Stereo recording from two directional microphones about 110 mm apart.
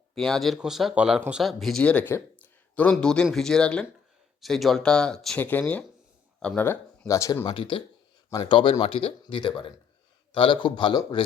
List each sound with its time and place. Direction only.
0.1 s speech: centre (ahead or behind)
1.8 s a sound: 10° left (ahead or behind)
2.9 s speech: 5° left (ahead or behind)
5.4 s speech: 15° left (ahead or behind)
7.1 s speech: 30° left (ahead or behind)
7.4 s a man's voice: 50° left (ahead or behind)
9.2 s a man's voice: 45° left (ahead or behind)